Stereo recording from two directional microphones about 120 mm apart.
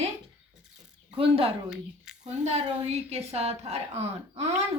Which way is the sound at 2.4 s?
65° right (ahead or behind).